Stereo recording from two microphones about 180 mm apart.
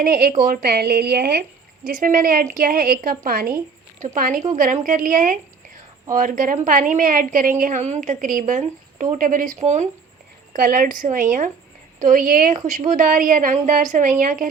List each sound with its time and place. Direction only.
0.0 s speech: 55° right (ahead or behind)
1.9 s a woman's voice: 45° right (ahead or behind)